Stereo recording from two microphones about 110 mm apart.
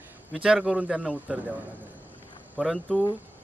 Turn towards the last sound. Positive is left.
turn(degrees=0)  # may be behind; listen again after turning